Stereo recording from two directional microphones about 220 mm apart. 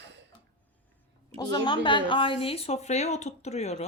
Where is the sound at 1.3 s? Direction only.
20° left (ahead or behind).